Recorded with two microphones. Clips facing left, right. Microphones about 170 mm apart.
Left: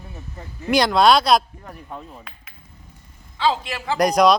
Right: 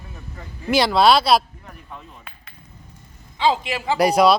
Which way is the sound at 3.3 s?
15° right (ahead or behind).